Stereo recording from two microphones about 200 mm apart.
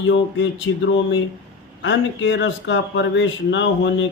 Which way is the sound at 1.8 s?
65° left (ahead or behind).